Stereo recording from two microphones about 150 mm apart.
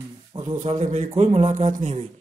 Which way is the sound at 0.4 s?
45° right (ahead or behind).